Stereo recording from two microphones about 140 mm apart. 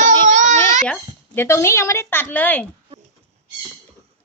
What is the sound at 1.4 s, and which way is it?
A woman's voice, 20° left (ahead or behind).